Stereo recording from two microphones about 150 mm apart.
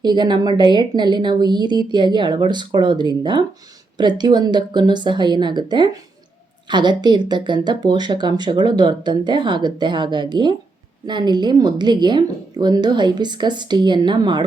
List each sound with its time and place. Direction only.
0.0 s speech: 30° right (ahead or behind)